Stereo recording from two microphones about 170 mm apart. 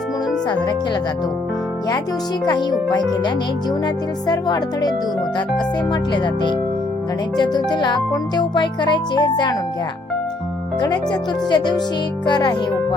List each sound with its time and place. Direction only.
2.5 s music: 25° left (ahead or behind)
10.8 s music: 25° left (ahead or behind)